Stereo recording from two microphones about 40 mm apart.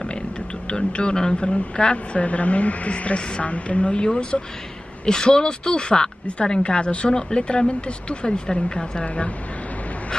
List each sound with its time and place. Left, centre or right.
0.7 s a woman's voice: left
2.2 s a woman's voice: left
9.0 s a woman's voice: left